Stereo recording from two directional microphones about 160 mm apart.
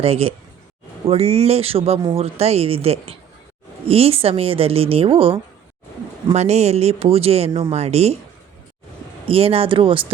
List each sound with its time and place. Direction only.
0.0 s a woman's voice: 40° right (ahead or behind)
9.2 s a woman's voice: 35° right (ahead or behind)